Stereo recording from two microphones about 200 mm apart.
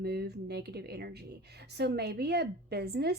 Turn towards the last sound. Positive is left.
turn(degrees=-55)  # may be behind; listen again after turning